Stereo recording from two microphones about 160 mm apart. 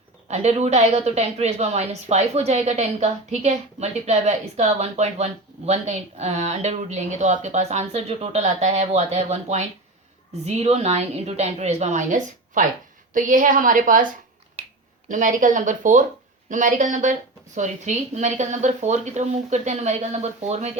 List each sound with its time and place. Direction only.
0.3 s a woman's voice: 45° right (ahead or behind)